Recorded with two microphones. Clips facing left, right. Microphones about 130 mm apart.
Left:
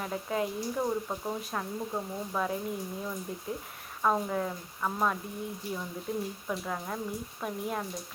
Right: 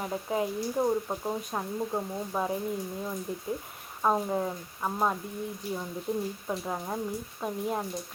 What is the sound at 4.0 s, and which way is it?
Speech, 20° right (ahead or behind).